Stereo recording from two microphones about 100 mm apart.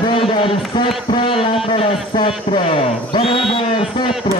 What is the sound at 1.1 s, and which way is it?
A man's voice, 65° left (ahead or behind).